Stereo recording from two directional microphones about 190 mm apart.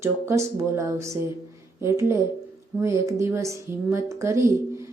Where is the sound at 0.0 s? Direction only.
15° right (ahead or behind).